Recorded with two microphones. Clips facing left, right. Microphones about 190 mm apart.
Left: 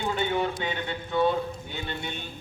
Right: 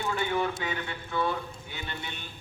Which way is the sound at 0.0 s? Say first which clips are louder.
Left 2 dB; 25° left (ahead or behind).